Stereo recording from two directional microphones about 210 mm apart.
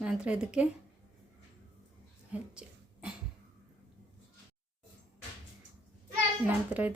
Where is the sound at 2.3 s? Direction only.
5° right (ahead or behind).